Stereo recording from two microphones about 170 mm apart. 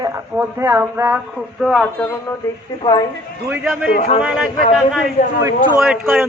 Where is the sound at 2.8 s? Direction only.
25° left (ahead or behind).